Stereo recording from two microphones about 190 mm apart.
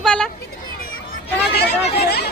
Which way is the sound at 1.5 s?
55° left (ahead or behind).